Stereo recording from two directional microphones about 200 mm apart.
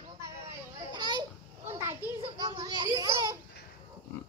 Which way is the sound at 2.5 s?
20° right (ahead or behind).